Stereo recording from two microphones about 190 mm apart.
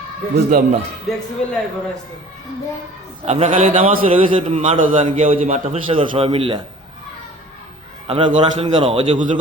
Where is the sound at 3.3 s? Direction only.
30° right (ahead or behind).